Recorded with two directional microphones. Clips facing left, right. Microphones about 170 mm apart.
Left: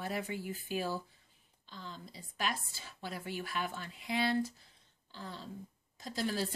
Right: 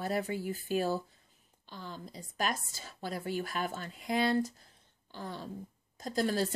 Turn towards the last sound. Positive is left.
turn(degrees=-45)  # may be behind; listen again after turning